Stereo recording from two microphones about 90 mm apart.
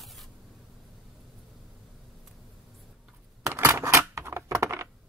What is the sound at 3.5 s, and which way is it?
Typing, 30° right (ahead or behind).